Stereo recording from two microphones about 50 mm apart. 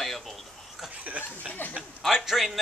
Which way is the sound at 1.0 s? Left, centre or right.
Right.